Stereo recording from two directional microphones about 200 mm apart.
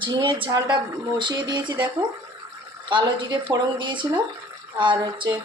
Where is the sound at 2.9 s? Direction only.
20° right (ahead or behind).